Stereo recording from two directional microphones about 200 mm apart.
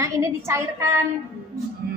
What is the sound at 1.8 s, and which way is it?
Music, 50° right (ahead or behind).